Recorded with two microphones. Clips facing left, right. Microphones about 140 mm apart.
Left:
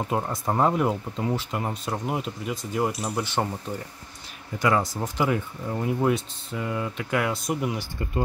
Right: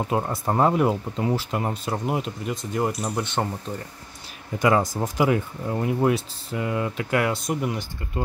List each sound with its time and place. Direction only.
0.1 s speech: 5° right (ahead or behind)
4.6 s speech: 20° right (ahead or behind)
5.1 s speech: 10° right (ahead or behind)